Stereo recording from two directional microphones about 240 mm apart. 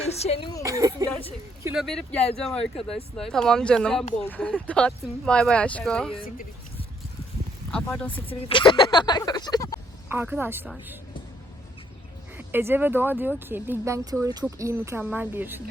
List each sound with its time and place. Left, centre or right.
0.2 s a woman's voice: left
0.6 s speech: centre
1.7 s speech: centre
7.7 s speech: centre
8.3 s speech: left
10.1 s speech: centre
12.4 s speech: centre